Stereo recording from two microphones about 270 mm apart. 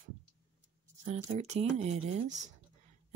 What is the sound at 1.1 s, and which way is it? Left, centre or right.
Speech, right.